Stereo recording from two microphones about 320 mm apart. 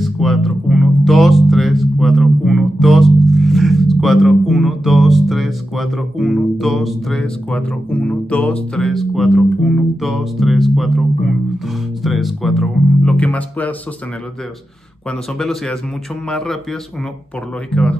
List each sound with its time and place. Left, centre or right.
0.0 s speech: centre
15.3 s speech: centre
17.6 s speech: centre